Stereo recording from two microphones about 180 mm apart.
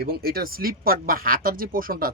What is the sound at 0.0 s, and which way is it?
A man's voice, 55° right (ahead or behind).